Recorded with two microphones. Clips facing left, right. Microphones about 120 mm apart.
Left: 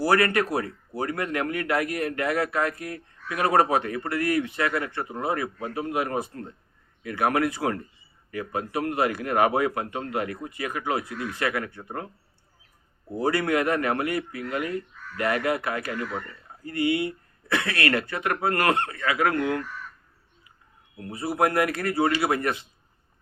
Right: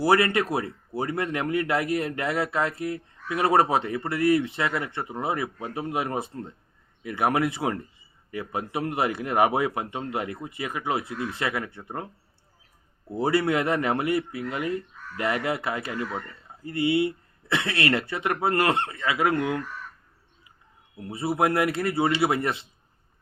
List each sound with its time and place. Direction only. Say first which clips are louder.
0.0 s speech: even; 25° right (ahead or behind)
13.1 s speech: right 1 dB; 25° right (ahead or behind)
21.1 s speech: even; 25° right (ahead or behind)